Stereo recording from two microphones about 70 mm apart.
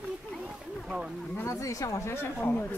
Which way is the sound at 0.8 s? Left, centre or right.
Centre.